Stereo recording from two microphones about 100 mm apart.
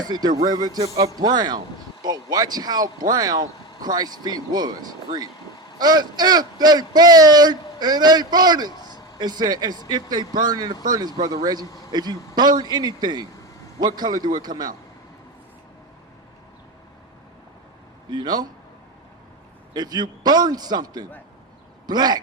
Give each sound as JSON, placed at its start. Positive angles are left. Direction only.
{"t": 0.0, "sound": "speech", "side_deg": -45}
{"t": 18.1, "sound": "speech", "side_deg": -45}
{"t": 19.7, "sound": "speech", "side_deg": -45}